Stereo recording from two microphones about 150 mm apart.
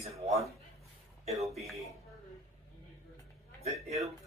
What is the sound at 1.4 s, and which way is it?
Speech, centre (ahead or behind).